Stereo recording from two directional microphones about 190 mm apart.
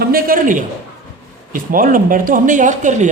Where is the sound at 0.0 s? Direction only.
50° right (ahead or behind).